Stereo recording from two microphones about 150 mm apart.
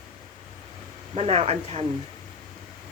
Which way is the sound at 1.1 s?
45° right (ahead or behind).